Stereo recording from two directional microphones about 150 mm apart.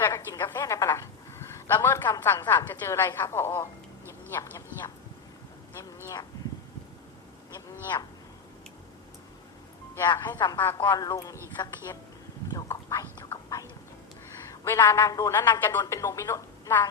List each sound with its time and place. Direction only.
0.0 s a sound: 20° left (ahead or behind)
2.3 s a woman's voice: 30° left (ahead or behind)
2.6 s a woman's voice: 20° left (ahead or behind)
10.1 s a man's voice: 30° left (ahead or behind)
12.5 s whispering: 20° left (ahead or behind)
14.6 s a woman's voice: 15° left (ahead or behind)